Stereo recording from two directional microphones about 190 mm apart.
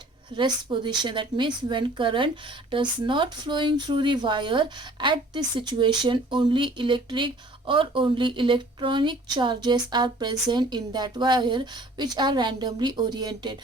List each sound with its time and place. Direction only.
0.3 s a woman's voice: 25° right (ahead or behind)